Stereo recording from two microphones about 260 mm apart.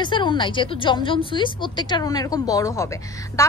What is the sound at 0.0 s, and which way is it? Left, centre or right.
A woman's voice, centre.